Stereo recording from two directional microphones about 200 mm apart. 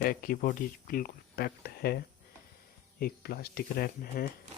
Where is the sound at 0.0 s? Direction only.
45° left (ahead or behind).